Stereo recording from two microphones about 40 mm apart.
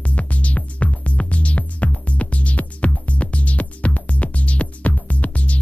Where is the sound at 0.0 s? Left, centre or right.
Left.